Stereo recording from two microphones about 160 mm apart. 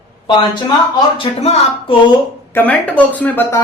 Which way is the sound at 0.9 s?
35° left (ahead or behind).